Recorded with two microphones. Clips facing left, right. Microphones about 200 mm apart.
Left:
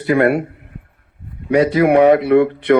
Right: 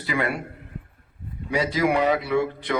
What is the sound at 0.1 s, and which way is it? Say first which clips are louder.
Speech: left 12 dB; 55° left (ahead or behind).